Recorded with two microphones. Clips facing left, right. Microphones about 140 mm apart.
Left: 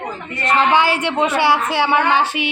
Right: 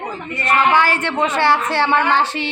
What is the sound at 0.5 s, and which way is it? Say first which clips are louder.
Speech: even; 20° left (ahead or behind).